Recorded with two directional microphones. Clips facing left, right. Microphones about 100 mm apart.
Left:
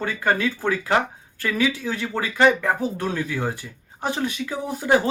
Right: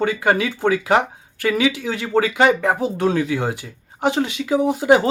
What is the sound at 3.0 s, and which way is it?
Speech, 85° right.